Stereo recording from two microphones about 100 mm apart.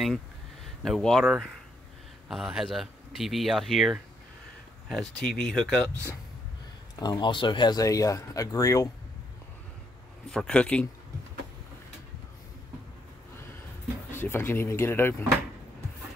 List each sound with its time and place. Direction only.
0.8 s speech: centre (ahead or behind)
7.0 s speech: 45° left (ahead or behind)
7.7 s speech: 35° left (ahead or behind)
10.3 s speech: 10° left (ahead or behind)
14.1 s speech: 20° left (ahead or behind)